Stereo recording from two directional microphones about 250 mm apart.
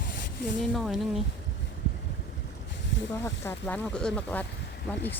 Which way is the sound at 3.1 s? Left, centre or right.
Centre.